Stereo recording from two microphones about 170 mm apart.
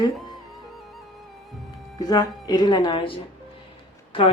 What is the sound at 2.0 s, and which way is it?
Speech, 20° left (ahead or behind).